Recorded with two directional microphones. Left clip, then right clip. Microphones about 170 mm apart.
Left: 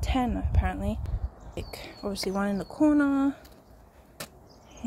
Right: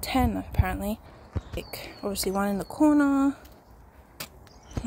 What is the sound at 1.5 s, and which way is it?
A woman's voice, 15° right (ahead or behind).